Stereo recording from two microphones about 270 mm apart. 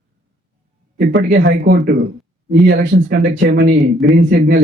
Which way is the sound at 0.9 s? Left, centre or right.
Right.